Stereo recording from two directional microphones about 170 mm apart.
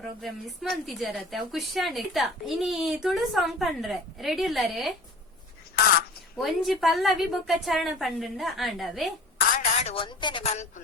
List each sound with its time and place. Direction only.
0.0 s a woman's voice: centre (ahead or behind)
6.3 s a woman's voice: centre (ahead or behind)
9.6 s a woman's voice: 35° left (ahead or behind)
10.5 s a woman's voice: 40° left (ahead or behind)